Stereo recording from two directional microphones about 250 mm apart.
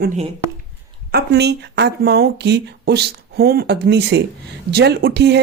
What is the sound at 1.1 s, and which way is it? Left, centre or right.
Speech, right.